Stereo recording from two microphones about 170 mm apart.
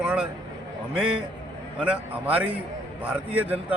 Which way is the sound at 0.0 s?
5° right (ahead or behind).